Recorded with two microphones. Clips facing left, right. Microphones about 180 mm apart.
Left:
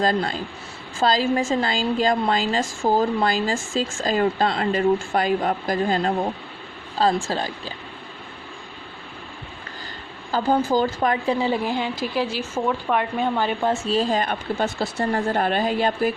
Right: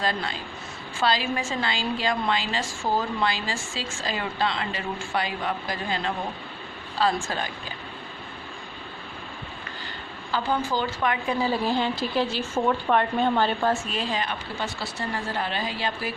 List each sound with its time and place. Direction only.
0.0 s a woman's voice: 40° left (ahead or behind)
7.1 s a woman's voice: 35° left (ahead or behind)
10.3 s speech: 40° left (ahead or behind)
11.3 s speech: 20° left (ahead or behind)
13.8 s speech: 40° left (ahead or behind)